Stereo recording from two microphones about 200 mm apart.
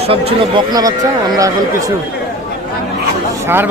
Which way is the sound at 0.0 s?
30° right (ahead or behind).